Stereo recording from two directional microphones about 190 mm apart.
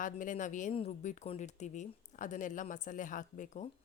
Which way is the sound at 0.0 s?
45° left (ahead or behind).